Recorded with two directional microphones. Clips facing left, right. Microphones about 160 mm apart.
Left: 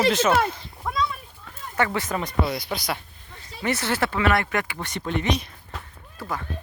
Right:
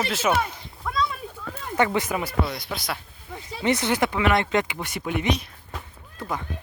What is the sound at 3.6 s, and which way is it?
Speech, 15° right (ahead or behind).